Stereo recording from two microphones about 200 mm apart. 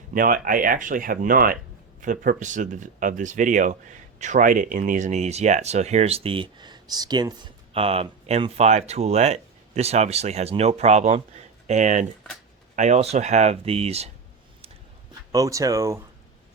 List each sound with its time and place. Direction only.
0.1 s speech: 45° right (ahead or behind)
15.3 s speech: 15° right (ahead or behind)